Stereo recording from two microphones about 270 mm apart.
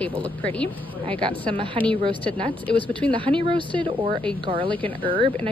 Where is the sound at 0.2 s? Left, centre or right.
Centre.